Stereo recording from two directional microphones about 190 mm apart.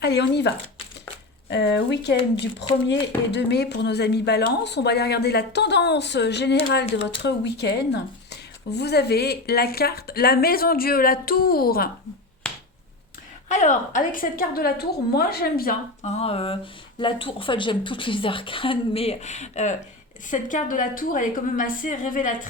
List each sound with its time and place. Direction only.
0.0 s speech: 60° left (ahead or behind)
3.3 s speech: 60° left (ahead or behind)
13.5 s a woman's voice: 40° left (ahead or behind); by 15.7 s 55° left (ahead or behind)
16.0 s a sound: 35° left (ahead or behind)
17.0 s a woman's voice: 25° left (ahead or behind); by 22.4 s 45° left (ahead or behind)